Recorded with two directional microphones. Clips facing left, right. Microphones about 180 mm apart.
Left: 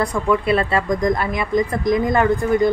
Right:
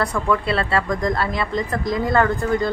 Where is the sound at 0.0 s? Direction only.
15° left (ahead or behind).